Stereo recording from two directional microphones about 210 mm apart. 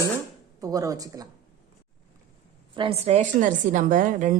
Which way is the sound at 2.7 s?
25° right (ahead or behind).